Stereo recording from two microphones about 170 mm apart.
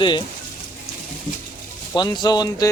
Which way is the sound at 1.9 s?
25° left (ahead or behind).